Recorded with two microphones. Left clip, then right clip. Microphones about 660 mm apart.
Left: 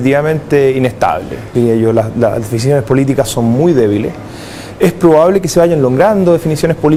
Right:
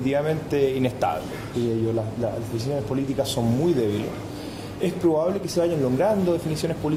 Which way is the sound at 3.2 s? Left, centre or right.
Left.